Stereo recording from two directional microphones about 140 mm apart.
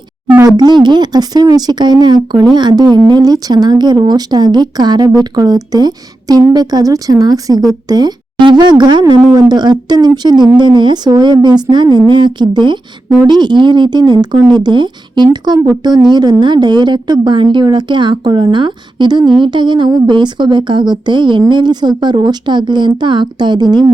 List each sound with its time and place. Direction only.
0.3 s a woman's voice: 30° right (ahead or behind)